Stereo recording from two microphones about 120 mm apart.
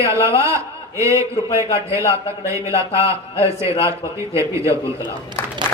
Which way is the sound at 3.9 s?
25° right (ahead or behind).